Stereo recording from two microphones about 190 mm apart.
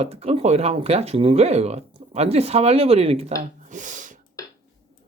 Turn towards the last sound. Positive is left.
turn(degrees=-40)  # may be behind; listen again after turning